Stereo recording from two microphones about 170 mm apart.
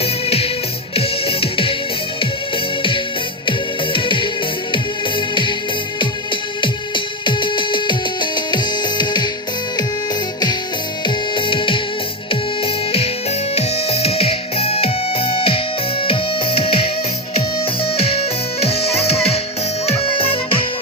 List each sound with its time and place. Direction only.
0.0 s music: 35° left (ahead or behind)
3.9 s music: 30° left (ahead or behind)
5.3 s music: 30° left (ahead or behind)
6.6 s music: 30° left (ahead or behind)
11.0 s music: 30° left (ahead or behind)